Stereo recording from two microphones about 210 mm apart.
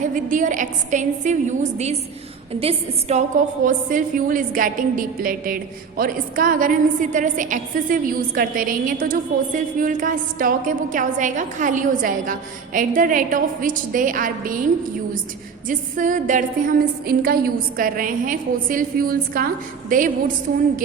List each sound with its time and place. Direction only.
0.0 s a woman's voice: 40° right (ahead or behind)